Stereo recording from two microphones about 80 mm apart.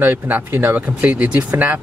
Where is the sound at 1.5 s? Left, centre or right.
Right.